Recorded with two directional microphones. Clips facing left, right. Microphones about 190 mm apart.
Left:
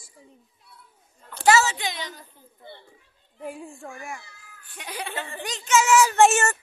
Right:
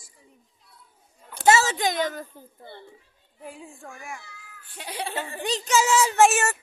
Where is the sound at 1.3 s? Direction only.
10° right (ahead or behind).